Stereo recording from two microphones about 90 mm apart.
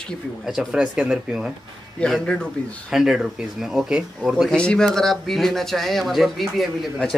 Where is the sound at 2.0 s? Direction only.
10° left (ahead or behind).